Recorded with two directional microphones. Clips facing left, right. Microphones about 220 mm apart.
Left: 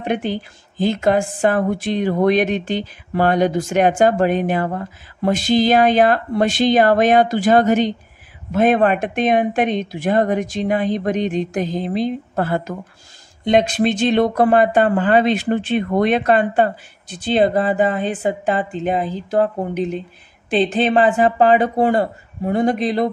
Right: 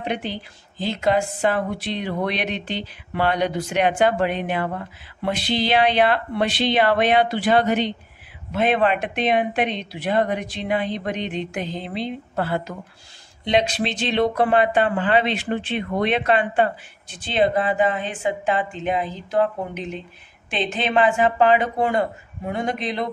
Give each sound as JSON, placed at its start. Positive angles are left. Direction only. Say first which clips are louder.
{"t": 0.0, "sound": "a woman's voice", "louder": "left 6 dB", "side_deg": 50}